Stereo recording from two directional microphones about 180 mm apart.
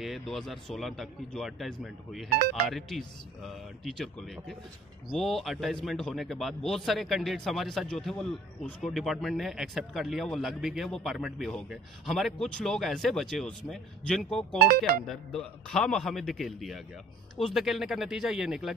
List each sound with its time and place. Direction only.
0.0 s speech: centre (ahead or behind)